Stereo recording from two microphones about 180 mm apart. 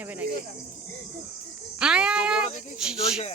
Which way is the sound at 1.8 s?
5° right (ahead or behind).